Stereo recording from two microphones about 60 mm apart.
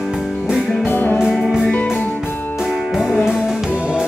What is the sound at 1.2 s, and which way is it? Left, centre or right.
Music, centre.